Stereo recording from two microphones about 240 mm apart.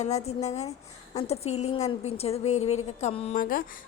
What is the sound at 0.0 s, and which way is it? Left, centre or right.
A woman's voice, left.